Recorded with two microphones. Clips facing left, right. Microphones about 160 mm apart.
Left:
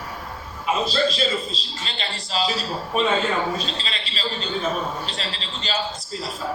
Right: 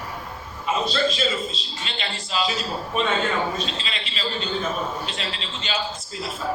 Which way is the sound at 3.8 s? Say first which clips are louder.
Even; 35° left (ahead or behind).